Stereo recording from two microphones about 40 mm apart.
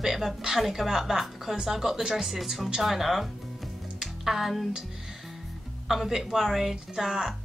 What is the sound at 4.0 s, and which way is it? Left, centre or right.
Music, centre.